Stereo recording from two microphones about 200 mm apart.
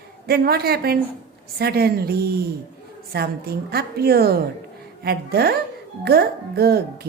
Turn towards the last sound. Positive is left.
turn(degrees=-50)  # may be behind; listen again after turning